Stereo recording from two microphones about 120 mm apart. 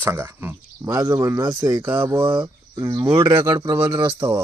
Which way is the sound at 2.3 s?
35° right (ahead or behind).